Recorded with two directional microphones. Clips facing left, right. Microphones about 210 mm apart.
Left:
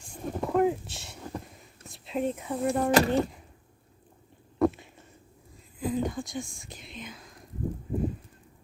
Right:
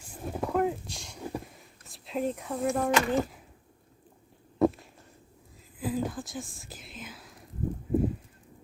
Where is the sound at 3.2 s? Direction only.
Centre (ahead or behind).